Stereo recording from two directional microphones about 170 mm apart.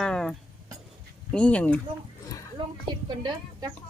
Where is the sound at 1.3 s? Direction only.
5° left (ahead or behind).